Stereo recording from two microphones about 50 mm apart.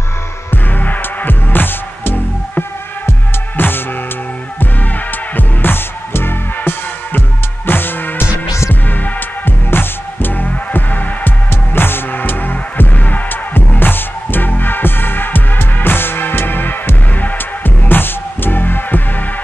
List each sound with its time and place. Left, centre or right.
0.5 s music: left
5.3 s music: left
9.7 s music: left
11.5 s music: left